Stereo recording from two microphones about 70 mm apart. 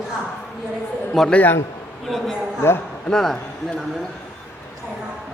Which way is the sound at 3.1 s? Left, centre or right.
Centre.